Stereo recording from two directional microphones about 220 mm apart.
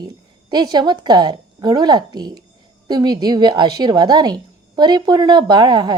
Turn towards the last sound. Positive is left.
turn(degrees=-20)  # may be behind; listen again after turning